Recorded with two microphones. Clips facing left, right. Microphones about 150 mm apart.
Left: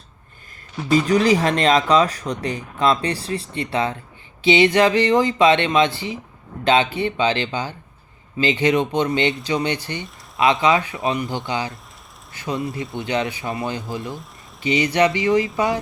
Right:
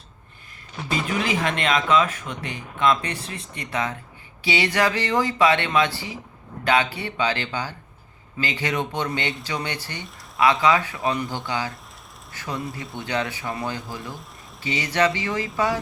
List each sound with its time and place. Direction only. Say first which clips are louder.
1.0 s speech: left 5 dB; 40° left (ahead or behind); by 13.6 s 20° left (ahead or behind)
14.6 s speech: left 5 dB; 20° left (ahead or behind)